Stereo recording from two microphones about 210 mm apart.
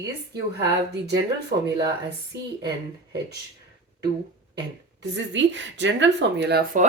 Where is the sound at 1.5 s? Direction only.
45° right (ahead or behind).